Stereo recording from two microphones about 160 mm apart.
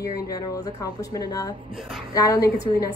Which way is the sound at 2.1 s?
20° left (ahead or behind).